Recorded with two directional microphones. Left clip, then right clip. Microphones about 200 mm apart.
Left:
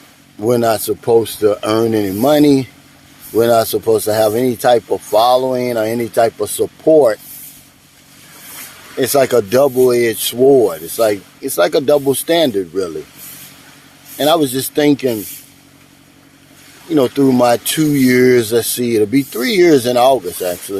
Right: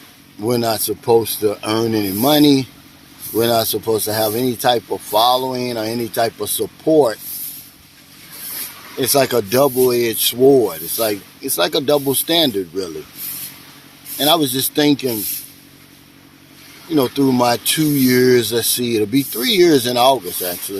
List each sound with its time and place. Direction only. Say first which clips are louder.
0.3 s speech: left 5 dB; 40° left (ahead or behind)
9.0 s speech: left 4 dB; 40° left (ahead or behind)
14.2 s speech: left 2 dB; 35° left (ahead or behind)
16.9 s speech: left 4 dB; 40° left (ahead or behind)